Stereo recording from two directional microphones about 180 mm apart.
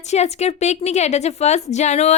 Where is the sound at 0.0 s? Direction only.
40° left (ahead or behind).